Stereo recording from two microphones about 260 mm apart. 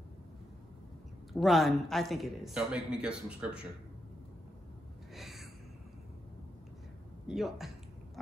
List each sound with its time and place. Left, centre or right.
1.3 s speech: centre
5.1 s a sound: centre
7.2 s speech: centre